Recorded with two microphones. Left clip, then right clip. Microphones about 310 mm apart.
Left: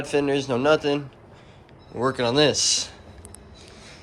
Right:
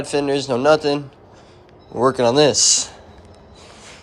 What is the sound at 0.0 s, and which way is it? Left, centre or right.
Speech, centre.